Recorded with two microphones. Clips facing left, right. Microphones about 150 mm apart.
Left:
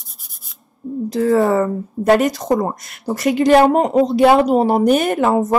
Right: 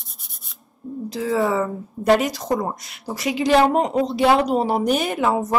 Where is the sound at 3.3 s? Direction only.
50° left (ahead or behind).